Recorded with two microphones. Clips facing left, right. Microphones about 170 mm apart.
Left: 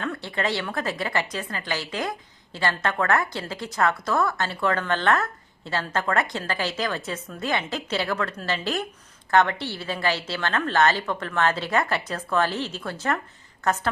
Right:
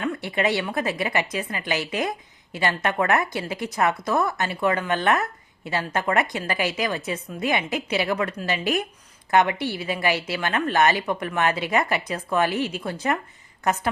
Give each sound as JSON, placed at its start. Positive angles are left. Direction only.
{"t": 0.0, "sound": "a woman's voice", "side_deg": -15}